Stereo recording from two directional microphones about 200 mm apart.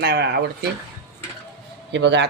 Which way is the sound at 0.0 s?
55° right (ahead or behind).